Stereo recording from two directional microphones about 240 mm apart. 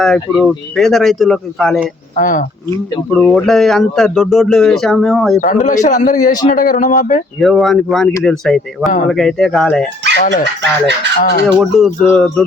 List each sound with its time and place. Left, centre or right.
0.0 s speech: centre
2.1 s a man's voice: left
3.1 s speech: centre
5.5 s a man's voice: left
7.3 s speech: centre
10.2 s a man's voice: left
10.6 s fowl: right
11.2 s a man's voice: left
11.4 s speech: centre